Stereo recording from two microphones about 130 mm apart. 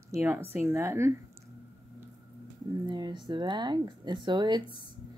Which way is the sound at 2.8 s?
35° right (ahead or behind).